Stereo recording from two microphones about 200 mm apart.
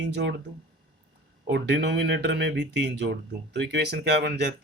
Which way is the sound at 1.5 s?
60° right (ahead or behind).